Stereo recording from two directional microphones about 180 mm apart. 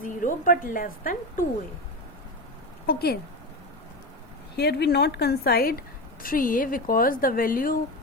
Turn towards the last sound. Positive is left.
turn(degrees=50)  # may be behind; listen again after turning